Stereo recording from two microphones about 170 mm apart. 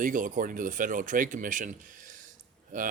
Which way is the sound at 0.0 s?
50° right (ahead or behind).